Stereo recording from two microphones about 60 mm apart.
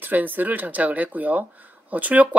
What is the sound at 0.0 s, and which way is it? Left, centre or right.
Speech, right.